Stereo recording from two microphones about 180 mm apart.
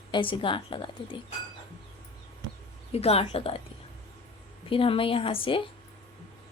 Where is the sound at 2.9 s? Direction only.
35° left (ahead or behind).